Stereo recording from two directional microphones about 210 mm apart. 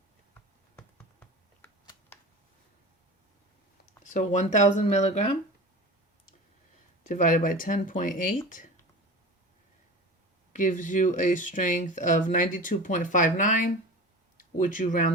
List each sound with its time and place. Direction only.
2.1 s a sound: 10° left (ahead or behind)
4.0 s speech: 40° left (ahead or behind)
7.1 s speech: 40° left (ahead or behind)
10.5 s speech: 40° left (ahead or behind)